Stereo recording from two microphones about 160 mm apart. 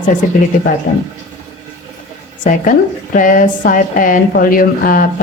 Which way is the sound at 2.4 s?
55° left (ahead or behind).